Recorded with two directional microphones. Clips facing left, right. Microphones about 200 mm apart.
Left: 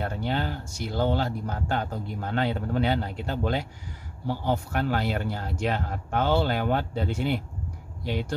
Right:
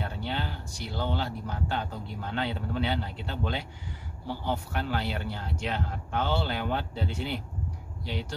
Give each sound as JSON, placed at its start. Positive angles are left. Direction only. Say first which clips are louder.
{"t": 0.0, "sound": "speech", "louder": "left 5 dB", "side_deg": 50}